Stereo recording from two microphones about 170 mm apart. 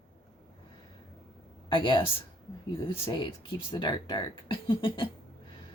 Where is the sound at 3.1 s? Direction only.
25° left (ahead or behind).